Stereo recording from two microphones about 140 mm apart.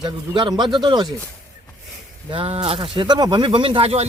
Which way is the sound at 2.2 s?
40° right (ahead or behind).